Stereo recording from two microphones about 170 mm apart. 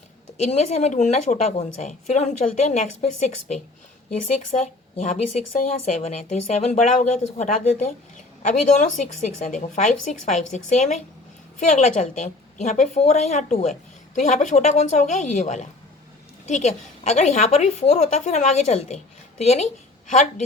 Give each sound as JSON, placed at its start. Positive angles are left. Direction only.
{"t": 0.5, "sound": "a woman's voice", "side_deg": 40}